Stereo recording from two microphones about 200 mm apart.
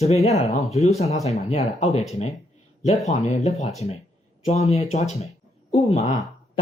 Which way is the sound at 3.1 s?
30° left (ahead or behind).